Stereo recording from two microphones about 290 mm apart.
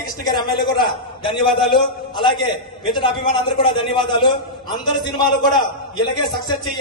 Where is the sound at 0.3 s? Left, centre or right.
Centre.